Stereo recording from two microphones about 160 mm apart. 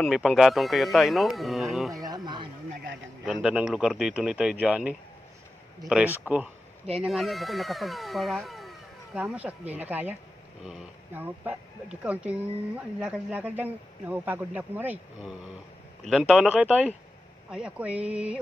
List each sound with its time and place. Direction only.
0.0 s speech: centre (ahead or behind)
2.0 s speech: 25° right (ahead or behind)
3.4 s speech: 5° right (ahead or behind)